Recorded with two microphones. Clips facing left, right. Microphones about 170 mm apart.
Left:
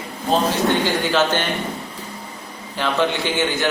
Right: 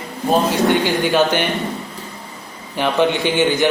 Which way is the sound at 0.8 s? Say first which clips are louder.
Right 3 dB; 15° right (ahead or behind).